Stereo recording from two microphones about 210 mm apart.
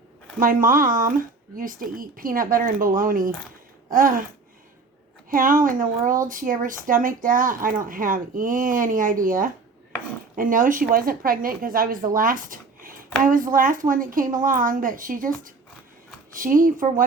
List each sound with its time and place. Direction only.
0.3 s speech: 40° right (ahead or behind)
5.3 s speech: 40° right (ahead or behind)